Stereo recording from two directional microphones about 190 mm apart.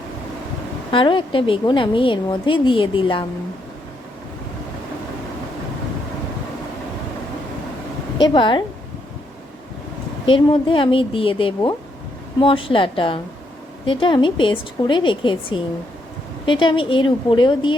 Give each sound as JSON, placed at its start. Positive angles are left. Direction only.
{"t": 0.9, "sound": "a woman's voice", "side_deg": 25}
{"t": 8.2, "sound": "a woman's voice", "side_deg": 25}
{"t": 10.2, "sound": "a woman's voice", "side_deg": 25}